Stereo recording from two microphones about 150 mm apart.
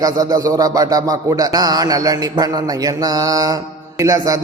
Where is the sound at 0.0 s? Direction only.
25° right (ahead or behind).